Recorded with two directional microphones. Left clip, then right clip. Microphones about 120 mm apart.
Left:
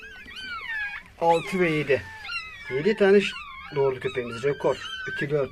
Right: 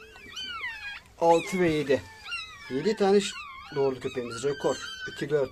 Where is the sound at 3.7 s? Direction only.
5° right (ahead or behind).